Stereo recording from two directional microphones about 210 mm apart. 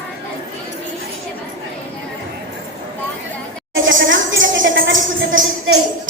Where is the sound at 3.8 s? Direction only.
65° right (ahead or behind).